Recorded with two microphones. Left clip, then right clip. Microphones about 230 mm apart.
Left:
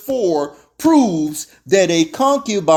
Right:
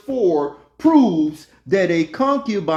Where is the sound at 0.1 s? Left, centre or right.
Left.